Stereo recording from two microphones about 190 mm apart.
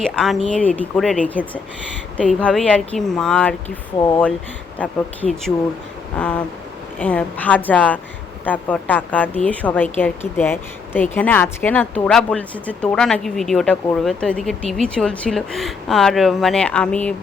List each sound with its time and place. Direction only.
0.0 s speech: centre (ahead or behind)
3.9 s speech: 20° left (ahead or behind)
4.8 s speech: 5° left (ahead or behind)
6.1 s speech: 5° left (ahead or behind)